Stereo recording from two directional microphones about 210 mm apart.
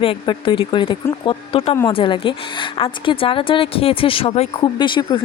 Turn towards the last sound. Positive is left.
turn(degrees=20)  # may be behind; listen again after turning